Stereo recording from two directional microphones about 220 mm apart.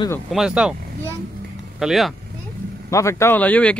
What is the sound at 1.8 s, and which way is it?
Speech, centre (ahead or behind).